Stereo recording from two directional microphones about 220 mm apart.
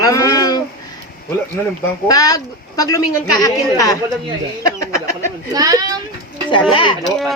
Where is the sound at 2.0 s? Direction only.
15° left (ahead or behind).